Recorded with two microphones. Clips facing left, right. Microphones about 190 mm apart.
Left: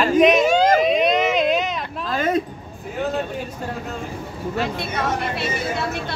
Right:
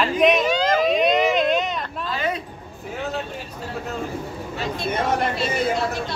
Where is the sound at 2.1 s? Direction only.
45° left (ahead or behind).